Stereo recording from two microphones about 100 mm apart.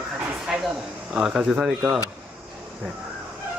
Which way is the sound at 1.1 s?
5° right (ahead or behind).